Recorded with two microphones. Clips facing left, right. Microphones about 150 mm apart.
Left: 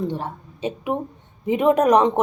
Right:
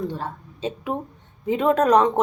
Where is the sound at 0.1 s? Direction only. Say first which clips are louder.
Left 2 dB; 15° left (ahead or behind).